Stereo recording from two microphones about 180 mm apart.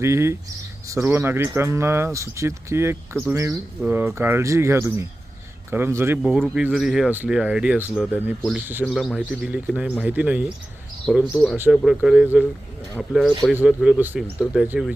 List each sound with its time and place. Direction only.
0.0 s speech: 15° right (ahead or behind)
6.2 s speech: centre (ahead or behind)
8.9 s speech: centre (ahead or behind)
11.0 s speech: 5° left (ahead or behind)